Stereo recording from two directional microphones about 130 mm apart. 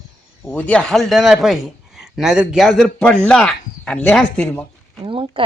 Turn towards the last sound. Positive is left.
turn(degrees=-40)  # may be behind; listen again after turning